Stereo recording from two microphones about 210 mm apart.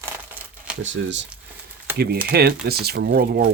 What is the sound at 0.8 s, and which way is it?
Speech, 60° right (ahead or behind).